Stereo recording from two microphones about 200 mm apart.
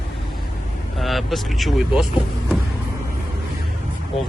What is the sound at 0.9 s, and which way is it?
Speech, centre (ahead or behind).